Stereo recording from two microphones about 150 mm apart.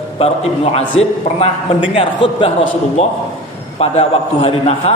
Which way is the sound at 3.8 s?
40° left (ahead or behind).